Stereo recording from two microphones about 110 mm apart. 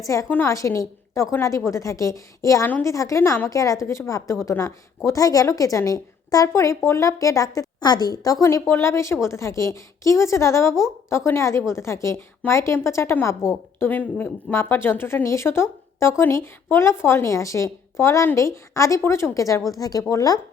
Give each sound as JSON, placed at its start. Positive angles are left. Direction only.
{"t": 0.0, "sound": "a woman's voice", "side_deg": 30}